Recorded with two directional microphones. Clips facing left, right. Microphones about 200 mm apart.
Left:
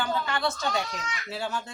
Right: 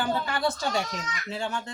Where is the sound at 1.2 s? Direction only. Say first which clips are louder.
Right 1 dB; 5° left (ahead or behind).